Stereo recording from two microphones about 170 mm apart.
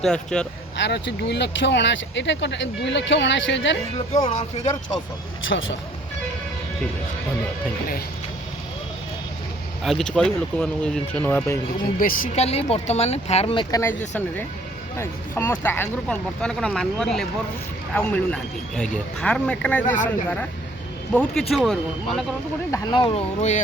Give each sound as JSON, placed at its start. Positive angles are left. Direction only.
{"t": 0.0, "sound": "speech", "side_deg": 5}
{"t": 0.8, "sound": "speech", "side_deg": 85}
{"t": 4.3, "sound": "speech", "side_deg": 40}
{"t": 9.8, "sound": "speech", "side_deg": 5}
{"t": 11.9, "sound": "speech", "side_deg": 55}
{"t": 22.7, "sound": "speech", "side_deg": 25}
{"t": 23.4, "sound": "speech", "side_deg": 45}